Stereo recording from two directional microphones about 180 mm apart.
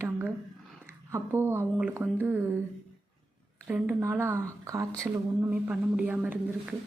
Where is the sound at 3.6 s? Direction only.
10° right (ahead or behind).